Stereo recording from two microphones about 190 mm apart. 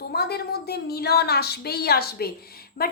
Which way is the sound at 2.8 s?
50° left (ahead or behind).